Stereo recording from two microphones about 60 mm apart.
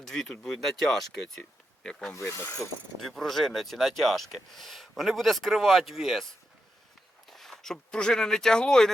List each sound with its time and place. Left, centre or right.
0.0 s speech: centre
2.3 s wood: left
2.6 s speech: centre
7.3 s speech: centre